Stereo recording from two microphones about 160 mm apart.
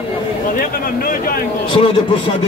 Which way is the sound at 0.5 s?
65° left (ahead or behind).